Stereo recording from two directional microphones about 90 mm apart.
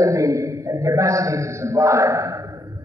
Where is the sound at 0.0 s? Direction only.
40° right (ahead or behind).